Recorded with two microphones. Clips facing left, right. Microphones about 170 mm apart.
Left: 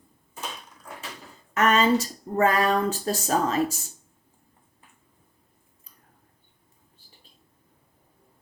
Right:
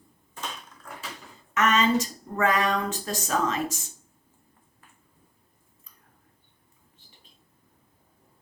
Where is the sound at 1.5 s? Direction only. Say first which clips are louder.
Left 2 dB; 35° left (ahead or behind).